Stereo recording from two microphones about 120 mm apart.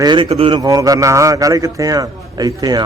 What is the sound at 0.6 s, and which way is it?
Mantra, 30° right (ahead or behind).